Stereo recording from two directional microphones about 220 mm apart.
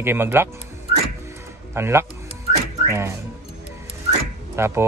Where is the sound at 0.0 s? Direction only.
10° right (ahead or behind).